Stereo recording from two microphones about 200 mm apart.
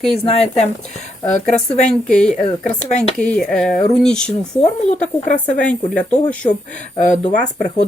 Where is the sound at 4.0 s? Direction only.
5° left (ahead or behind).